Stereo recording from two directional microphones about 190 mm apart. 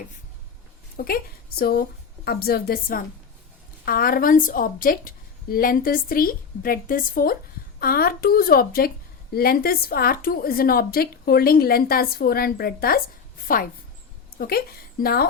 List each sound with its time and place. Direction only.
0.9 s a woman's voice: 50° left (ahead or behind)
14.3 s a woman's voice: 55° left (ahead or behind)